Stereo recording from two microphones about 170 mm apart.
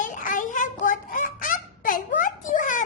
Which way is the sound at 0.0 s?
50° left (ahead or behind).